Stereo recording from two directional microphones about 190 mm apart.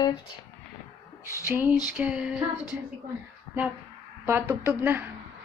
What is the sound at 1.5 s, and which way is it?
Speech, 10° right (ahead or behind).